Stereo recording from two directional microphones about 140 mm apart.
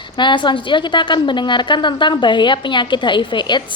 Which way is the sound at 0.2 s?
35° left (ahead or behind).